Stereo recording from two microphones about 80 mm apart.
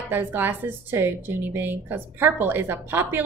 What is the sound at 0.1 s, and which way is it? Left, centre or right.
A woman's voice, right.